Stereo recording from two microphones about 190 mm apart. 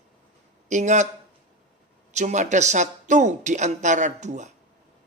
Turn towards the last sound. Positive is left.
turn(degrees=-40)  # may be behind; listen again after turning